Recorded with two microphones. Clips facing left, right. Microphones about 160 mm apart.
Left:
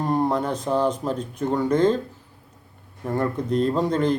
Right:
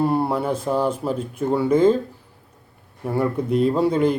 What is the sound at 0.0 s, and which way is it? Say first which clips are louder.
Speech: right 2 dB; 10° right (ahead or behind).